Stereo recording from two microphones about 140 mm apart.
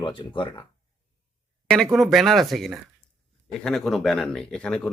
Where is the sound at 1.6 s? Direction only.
5° left (ahead or behind).